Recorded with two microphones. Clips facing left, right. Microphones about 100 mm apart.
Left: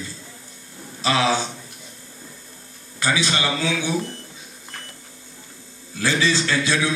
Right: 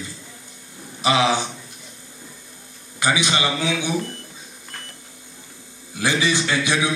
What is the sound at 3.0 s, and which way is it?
Speech, 15° right (ahead or behind).